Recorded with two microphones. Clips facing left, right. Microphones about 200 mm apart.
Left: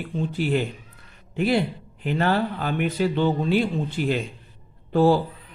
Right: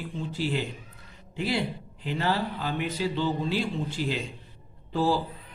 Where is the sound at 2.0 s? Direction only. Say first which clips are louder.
Left 6 dB; 55° left (ahead or behind).